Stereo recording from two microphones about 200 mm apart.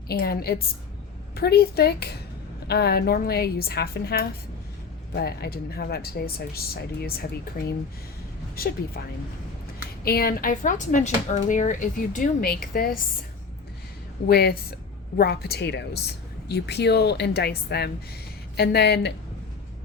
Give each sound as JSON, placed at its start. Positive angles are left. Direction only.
{"t": 0.1, "sound": "speech", "side_deg": 50}
{"t": 10.0, "sound": "speech", "side_deg": 50}
{"t": 14.3, "sound": "speech", "side_deg": 50}